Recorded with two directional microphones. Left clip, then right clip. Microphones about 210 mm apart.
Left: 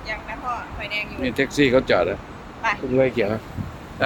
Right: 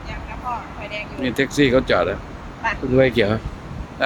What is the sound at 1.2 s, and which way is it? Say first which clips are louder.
Speech: right 2 dB; centre (ahead or behind).